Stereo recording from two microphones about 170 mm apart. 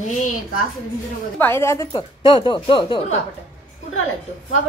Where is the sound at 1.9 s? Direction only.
30° left (ahead or behind).